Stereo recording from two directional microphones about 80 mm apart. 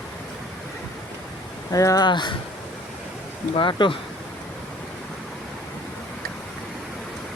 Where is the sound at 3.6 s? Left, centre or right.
Left.